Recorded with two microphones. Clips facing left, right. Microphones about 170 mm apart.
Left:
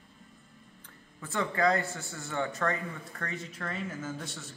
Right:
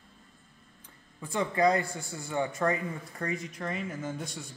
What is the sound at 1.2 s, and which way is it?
Speech, 20° right (ahead or behind).